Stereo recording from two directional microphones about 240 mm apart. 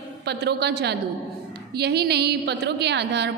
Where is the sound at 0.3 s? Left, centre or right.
Right.